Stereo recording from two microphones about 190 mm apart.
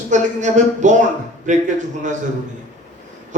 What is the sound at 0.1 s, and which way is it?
Speech, 40° right (ahead or behind).